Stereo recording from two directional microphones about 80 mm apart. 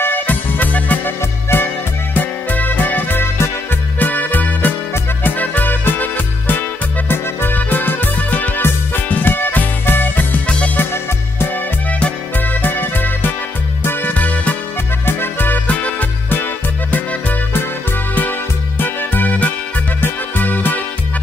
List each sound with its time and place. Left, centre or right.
0.0 s music: left
18.8 s music: left